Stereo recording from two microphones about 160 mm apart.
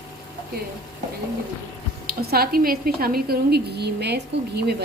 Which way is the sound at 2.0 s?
70° right (ahead or behind).